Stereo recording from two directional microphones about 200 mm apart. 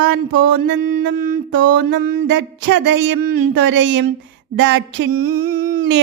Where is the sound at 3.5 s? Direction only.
65° right (ahead or behind).